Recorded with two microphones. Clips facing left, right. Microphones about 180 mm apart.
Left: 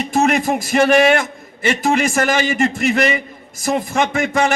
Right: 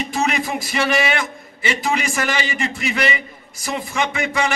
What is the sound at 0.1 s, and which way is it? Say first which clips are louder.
A man's voice: left 9 dB; 45° left (ahead or behind).